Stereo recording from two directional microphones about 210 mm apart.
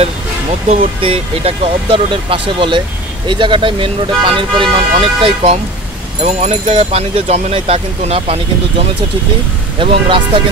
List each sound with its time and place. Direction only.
0.7 s speech: 30° right (ahead or behind)
9.8 s speech: 25° right (ahead or behind)